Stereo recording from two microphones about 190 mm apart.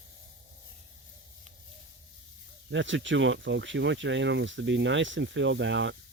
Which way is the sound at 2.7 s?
75° right (ahead or behind).